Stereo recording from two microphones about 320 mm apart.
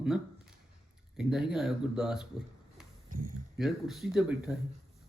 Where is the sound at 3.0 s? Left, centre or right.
Right.